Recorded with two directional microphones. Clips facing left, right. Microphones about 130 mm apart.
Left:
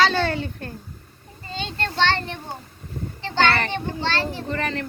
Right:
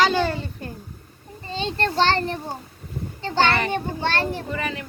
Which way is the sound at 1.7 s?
40° right (ahead or behind).